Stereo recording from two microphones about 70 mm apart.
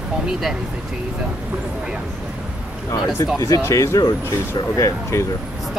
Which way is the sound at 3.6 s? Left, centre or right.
Left.